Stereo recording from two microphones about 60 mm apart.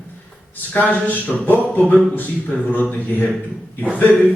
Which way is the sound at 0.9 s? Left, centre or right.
Left.